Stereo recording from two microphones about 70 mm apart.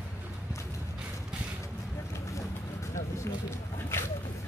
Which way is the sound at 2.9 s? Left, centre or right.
Left.